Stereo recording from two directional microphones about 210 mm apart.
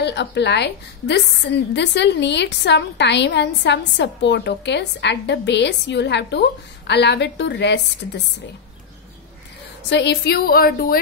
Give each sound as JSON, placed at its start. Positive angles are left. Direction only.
{"t": 0.0, "sound": "a woman's voice", "side_deg": 55}
{"t": 9.8, "sound": "a woman's voice", "side_deg": 55}